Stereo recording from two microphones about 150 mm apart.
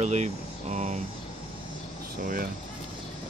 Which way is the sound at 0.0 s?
50° right (ahead or behind).